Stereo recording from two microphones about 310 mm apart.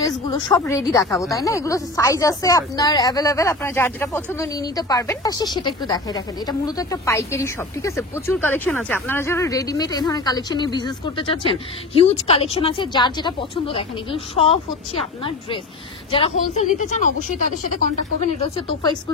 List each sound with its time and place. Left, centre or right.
0.3 s speech: centre
16.1 s a woman's voice: centre
18.4 s speech: centre